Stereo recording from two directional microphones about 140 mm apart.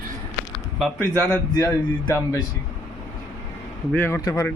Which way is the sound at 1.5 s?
15° left (ahead or behind).